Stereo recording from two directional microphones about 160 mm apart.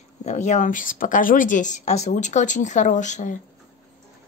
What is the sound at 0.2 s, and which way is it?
A woman's voice, 50° left (ahead or behind).